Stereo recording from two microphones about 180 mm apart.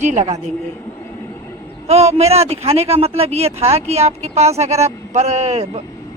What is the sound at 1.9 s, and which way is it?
Speech, 35° right (ahead or behind).